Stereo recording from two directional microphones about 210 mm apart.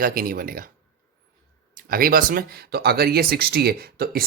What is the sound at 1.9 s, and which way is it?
Speech, 45° right (ahead or behind).